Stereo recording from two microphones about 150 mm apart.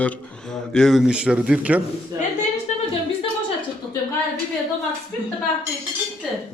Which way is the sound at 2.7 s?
50° left (ahead or behind).